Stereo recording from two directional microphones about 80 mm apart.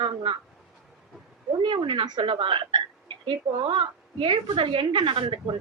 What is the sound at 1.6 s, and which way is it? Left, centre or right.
A woman's voice, right.